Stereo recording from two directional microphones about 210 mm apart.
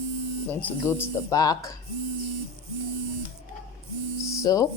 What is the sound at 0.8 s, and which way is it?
Speech, 10° left (ahead or behind).